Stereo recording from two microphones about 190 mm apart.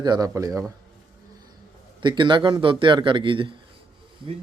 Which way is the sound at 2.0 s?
25° right (ahead or behind).